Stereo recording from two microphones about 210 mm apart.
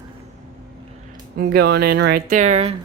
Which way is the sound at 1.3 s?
50° right (ahead or behind).